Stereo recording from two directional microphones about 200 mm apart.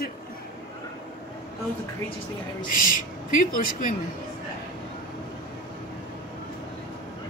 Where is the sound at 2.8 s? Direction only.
45° left (ahead or behind).